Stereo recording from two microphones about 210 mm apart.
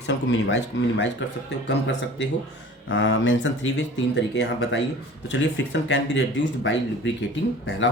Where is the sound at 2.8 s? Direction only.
65° left (ahead or behind).